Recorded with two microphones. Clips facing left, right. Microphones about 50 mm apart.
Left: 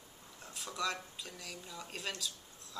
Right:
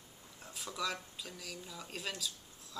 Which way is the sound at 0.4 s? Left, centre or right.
Centre.